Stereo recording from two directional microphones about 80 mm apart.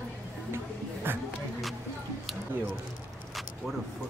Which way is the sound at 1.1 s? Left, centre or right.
Right.